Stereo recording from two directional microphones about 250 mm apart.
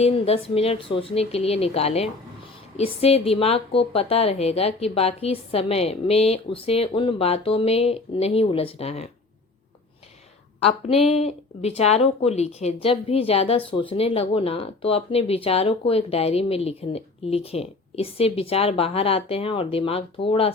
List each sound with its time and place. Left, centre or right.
0.0 s a woman's voice: left
10.6 s a woman's voice: left